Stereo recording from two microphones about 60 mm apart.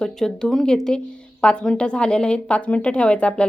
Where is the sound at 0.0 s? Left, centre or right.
Centre.